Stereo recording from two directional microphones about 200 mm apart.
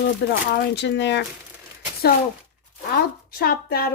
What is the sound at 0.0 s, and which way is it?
Speech, 60° left (ahead or behind).